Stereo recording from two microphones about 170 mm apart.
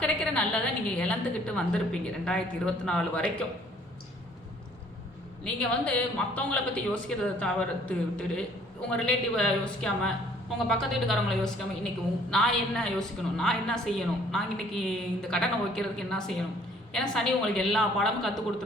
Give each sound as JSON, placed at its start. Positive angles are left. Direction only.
{"t": 0.0, "sound": "a woman's voice", "side_deg": 5}
{"t": 5.4, "sound": "a man's voice", "side_deg": 5}